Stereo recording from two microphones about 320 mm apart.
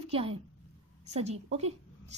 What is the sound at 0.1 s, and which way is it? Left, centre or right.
A woman's voice, centre.